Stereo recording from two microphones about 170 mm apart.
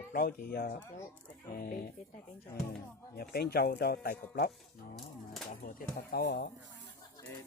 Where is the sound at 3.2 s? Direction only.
65° left (ahead or behind).